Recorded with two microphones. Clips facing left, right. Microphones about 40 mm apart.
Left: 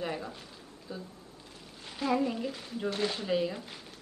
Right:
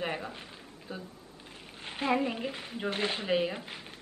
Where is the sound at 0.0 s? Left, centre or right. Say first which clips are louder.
Right 1 dB; right.